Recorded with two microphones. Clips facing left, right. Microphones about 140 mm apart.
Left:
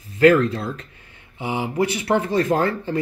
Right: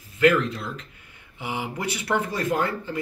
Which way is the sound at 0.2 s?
35° left (ahead or behind).